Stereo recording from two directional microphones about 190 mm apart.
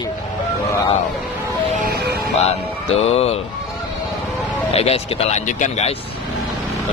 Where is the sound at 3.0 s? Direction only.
30° left (ahead or behind).